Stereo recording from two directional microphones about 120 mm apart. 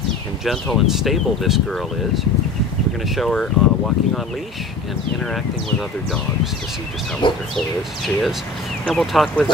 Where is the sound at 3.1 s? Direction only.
5° left (ahead or behind).